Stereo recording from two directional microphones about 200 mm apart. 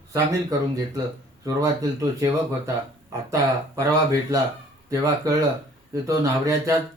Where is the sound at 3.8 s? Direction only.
15° right (ahead or behind).